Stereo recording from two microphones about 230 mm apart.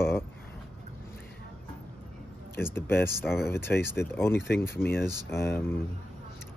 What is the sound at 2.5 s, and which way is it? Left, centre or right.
Speech, centre.